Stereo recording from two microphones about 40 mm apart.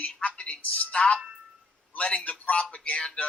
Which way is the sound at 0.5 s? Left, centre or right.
Left.